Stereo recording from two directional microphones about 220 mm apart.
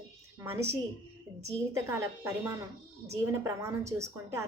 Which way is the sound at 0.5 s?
10° right (ahead or behind).